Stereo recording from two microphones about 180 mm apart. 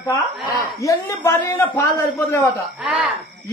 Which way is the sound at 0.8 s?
15° left (ahead or behind).